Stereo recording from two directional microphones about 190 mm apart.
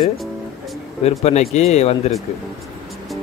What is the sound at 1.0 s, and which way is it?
Speech, 35° left (ahead or behind).